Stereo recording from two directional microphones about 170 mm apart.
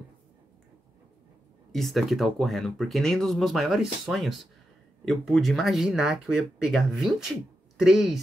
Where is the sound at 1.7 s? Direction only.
Centre (ahead or behind).